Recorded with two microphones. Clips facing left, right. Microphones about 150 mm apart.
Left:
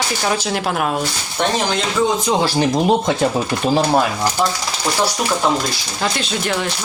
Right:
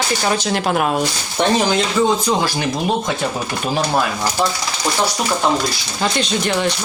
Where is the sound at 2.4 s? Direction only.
30° left (ahead or behind).